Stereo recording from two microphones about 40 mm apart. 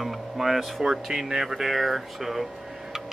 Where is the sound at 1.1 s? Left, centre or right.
Centre.